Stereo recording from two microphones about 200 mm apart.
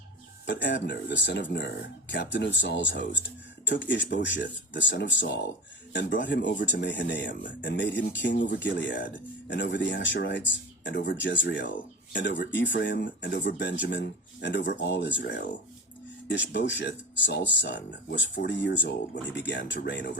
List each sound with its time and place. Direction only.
0.4 s speech: 60° left (ahead or behind)